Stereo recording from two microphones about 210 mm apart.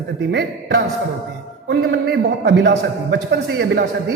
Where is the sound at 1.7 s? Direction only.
55° right (ahead or behind).